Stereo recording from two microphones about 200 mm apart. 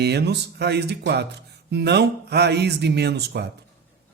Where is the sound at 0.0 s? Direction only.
55° right (ahead or behind).